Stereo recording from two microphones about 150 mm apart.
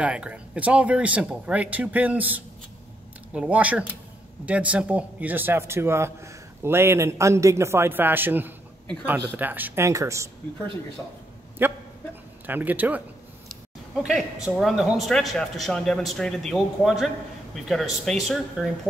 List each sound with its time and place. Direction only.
0.0 s speech: 10° right (ahead or behind)
11.6 s speech: 15° right (ahead or behind)
14.0 s a man's voice: centre (ahead or behind)